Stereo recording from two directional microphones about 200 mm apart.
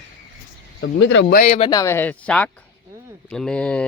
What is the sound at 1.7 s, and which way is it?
Speech, 15° left (ahead or behind).